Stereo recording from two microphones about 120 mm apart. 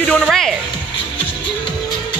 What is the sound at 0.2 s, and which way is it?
Music, centre (ahead or behind).